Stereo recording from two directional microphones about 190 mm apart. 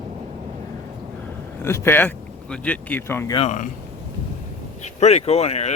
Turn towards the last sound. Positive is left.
turn(degrees=35)  # may be behind; listen again after turning